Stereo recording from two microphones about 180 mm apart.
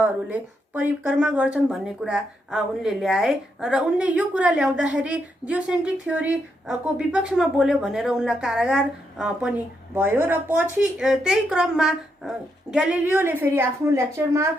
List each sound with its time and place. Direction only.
0.0 s a woman's voice: 10° right (ahead or behind)